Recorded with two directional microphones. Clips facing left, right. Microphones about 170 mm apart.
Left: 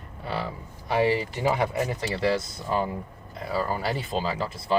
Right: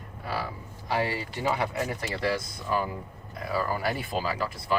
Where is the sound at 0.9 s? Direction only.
20° left (ahead or behind).